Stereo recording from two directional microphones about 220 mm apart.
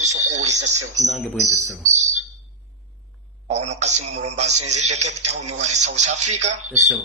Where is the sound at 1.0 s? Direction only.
Centre (ahead or behind).